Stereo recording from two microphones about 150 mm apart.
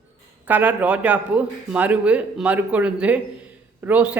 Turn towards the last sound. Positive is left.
turn(degrees=-10)  # may be behind; listen again after turning